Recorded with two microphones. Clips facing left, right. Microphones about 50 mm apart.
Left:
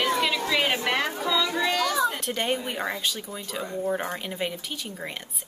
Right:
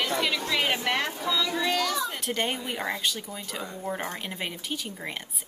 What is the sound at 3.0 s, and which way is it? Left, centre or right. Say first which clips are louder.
A woman's voice: even; centre.